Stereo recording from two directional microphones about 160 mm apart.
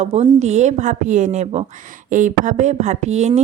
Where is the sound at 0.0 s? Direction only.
40° right (ahead or behind).